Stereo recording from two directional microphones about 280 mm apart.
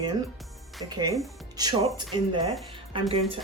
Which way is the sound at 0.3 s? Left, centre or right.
Centre.